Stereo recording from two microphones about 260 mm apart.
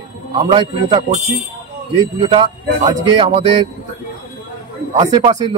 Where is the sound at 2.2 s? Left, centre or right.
Centre.